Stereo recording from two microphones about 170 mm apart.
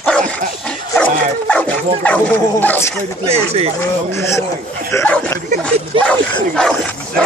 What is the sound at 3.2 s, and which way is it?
Speech, 35° right (ahead or behind).